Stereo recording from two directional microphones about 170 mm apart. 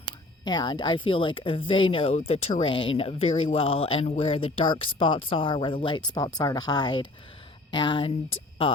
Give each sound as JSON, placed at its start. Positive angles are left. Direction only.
{"t": 0.0, "sound": "speech", "side_deg": 25}